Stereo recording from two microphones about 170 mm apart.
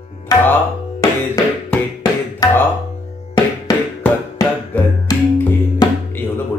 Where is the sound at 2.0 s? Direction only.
20° left (ahead or behind).